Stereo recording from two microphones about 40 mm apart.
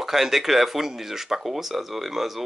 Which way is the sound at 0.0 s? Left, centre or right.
Centre.